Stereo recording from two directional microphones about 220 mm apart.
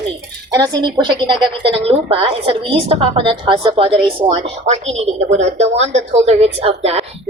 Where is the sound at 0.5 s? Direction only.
20° right (ahead or behind).